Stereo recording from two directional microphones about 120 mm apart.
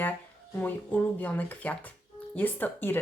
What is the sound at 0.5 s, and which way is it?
A woman's voice, 15° left (ahead or behind).